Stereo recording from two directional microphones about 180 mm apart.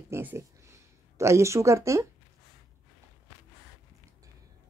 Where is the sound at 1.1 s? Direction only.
15° right (ahead or behind).